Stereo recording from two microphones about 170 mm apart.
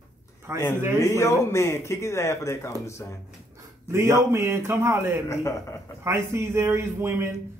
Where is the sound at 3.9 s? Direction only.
15° right (ahead or behind).